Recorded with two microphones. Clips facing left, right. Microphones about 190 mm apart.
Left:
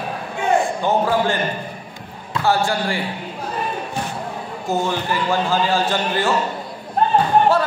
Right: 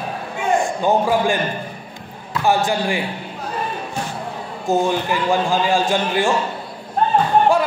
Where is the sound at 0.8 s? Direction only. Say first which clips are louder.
Right 3 dB; 15° right (ahead or behind).